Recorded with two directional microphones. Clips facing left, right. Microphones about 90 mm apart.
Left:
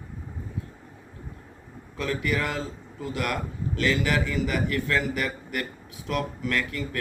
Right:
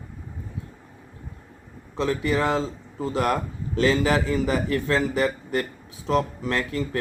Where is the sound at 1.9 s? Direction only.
25° right (ahead or behind).